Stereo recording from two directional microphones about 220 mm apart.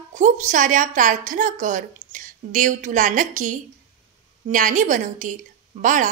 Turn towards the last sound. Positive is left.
turn(degrees=-35)  # may be behind; listen again after turning